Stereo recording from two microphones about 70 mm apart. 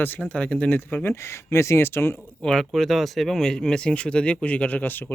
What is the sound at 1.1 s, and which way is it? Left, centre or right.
Speech, left.